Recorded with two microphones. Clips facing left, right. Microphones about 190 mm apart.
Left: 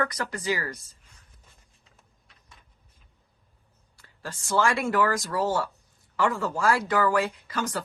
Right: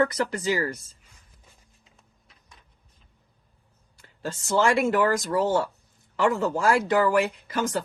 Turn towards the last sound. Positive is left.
turn(degrees=-20)  # may be behind; listen again after turning